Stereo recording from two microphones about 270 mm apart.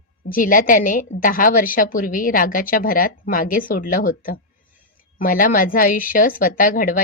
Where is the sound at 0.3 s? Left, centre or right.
Left.